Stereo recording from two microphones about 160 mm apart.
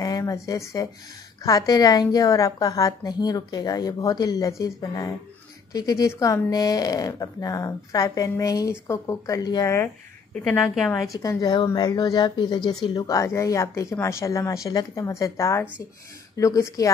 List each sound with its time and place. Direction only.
0.0 s speech: 20° left (ahead or behind)
10.6 s a woman's voice: centre (ahead or behind)
11.1 s speech: 25° left (ahead or behind)